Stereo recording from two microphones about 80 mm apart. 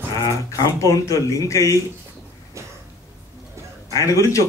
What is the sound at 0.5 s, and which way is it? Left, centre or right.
Speech, left.